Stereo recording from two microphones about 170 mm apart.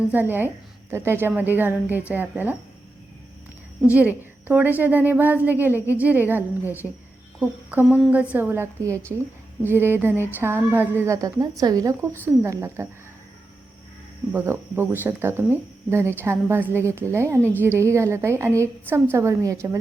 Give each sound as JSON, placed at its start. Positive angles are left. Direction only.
{"t": 0.1, "sound": "a woman's voice", "side_deg": -10}
{"t": 3.9, "sound": "a woman's voice", "side_deg": -10}
{"t": 6.8, "sound": "speech", "side_deg": 5}
{"t": 7.3, "sound": "a woman's voice", "side_deg": -5}
{"t": 14.3, "sound": "a woman's voice", "side_deg": -15}